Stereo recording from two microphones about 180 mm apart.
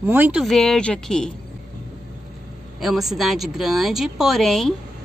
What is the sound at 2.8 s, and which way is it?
Speech, centre (ahead or behind).